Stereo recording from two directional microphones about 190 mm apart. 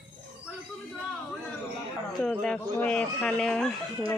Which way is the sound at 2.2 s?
5° left (ahead or behind).